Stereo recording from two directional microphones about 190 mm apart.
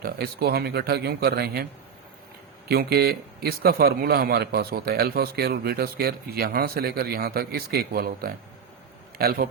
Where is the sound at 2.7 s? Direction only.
55° right (ahead or behind).